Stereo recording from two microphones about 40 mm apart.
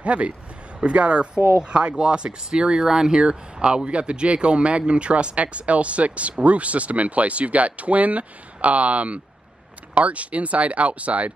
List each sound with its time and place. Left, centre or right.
0.0 s speech: right